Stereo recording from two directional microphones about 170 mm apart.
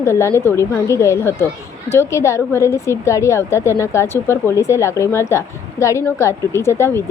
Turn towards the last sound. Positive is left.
turn(degrees=15)  # may be behind; listen again after turning